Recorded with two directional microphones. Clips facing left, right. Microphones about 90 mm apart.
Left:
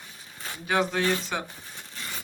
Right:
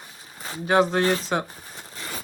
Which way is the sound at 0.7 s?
30° right (ahead or behind).